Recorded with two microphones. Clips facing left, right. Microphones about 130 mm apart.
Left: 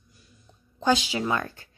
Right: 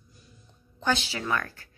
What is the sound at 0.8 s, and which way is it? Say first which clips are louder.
Speech: left 5 dB; 15° left (ahead or behind).